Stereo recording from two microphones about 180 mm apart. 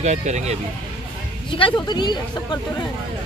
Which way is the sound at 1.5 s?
25° left (ahead or behind).